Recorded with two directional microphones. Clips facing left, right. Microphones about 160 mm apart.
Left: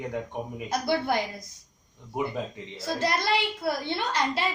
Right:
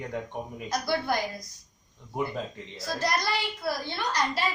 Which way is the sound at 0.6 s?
25° left (ahead or behind).